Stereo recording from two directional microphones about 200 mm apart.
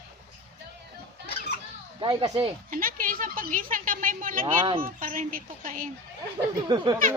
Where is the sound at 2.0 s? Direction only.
25° right (ahead or behind).